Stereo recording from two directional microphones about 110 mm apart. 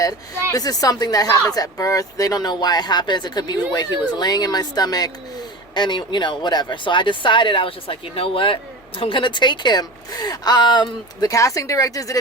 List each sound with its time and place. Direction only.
0.5 s speech: 35° left (ahead or behind)
11.3 s speech: 30° left (ahead or behind)